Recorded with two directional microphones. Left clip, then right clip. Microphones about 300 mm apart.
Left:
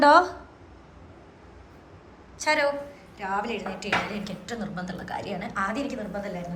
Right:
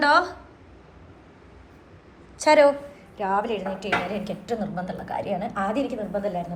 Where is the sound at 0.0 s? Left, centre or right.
Centre.